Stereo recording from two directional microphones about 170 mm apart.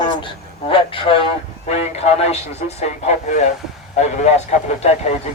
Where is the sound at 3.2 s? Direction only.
45° left (ahead or behind).